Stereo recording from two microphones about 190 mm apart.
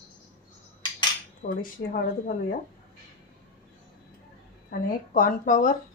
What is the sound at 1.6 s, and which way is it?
Speech, 45° left (ahead or behind).